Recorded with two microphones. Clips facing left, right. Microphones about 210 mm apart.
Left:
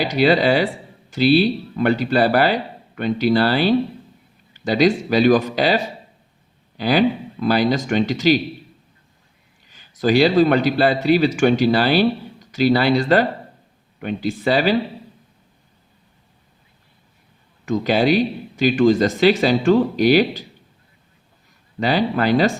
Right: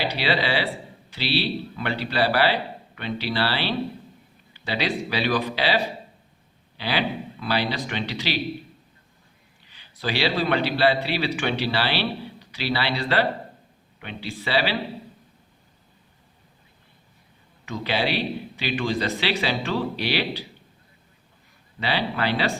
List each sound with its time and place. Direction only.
0.0 s a man's voice: 45° left (ahead or behind)
9.6 s a man's voice: 45° left (ahead or behind)
17.7 s a man's voice: 45° left (ahead or behind)
21.8 s a man's voice: 45° left (ahead or behind)